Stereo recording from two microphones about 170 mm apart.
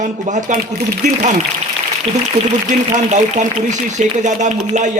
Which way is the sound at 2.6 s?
45° right (ahead or behind).